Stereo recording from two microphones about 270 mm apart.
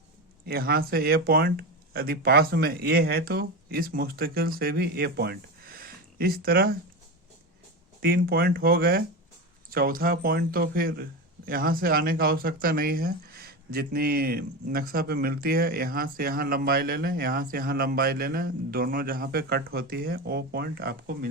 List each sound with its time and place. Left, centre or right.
0.4 s speech: right
8.0 s speech: right